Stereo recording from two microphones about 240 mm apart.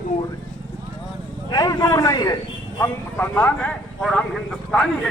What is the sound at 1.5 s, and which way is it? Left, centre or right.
Speech, centre.